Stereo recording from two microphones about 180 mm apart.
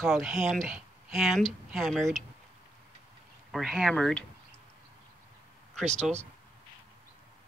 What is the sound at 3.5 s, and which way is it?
Speech, centre (ahead or behind).